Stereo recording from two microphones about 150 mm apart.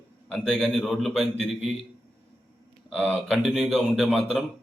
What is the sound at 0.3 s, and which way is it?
A man's voice, 5° left (ahead or behind).